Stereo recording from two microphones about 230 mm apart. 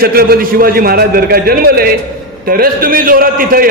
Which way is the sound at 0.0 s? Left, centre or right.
Right.